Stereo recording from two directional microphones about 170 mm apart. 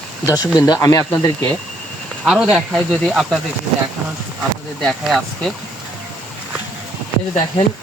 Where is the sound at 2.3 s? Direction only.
Centre (ahead or behind).